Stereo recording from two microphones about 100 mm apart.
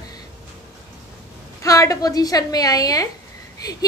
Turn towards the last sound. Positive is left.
turn(degrees=40)  # may be behind; listen again after turning